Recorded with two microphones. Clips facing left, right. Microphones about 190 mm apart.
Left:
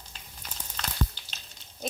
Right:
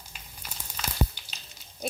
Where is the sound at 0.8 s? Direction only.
5° right (ahead or behind).